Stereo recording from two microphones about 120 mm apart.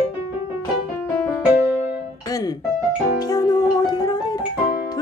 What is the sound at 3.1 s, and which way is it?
Music, 30° left (ahead or behind).